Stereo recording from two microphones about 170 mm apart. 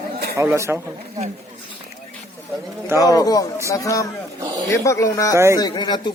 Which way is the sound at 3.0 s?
20° left (ahead or behind).